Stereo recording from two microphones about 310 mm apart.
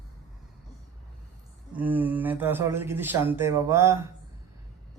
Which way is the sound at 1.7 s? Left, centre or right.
Centre.